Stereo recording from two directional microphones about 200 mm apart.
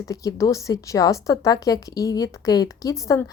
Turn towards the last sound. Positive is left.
turn(degrees=15)  # may be behind; listen again after turning